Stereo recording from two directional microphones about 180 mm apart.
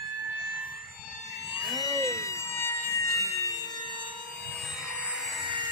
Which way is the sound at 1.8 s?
20° left (ahead or behind).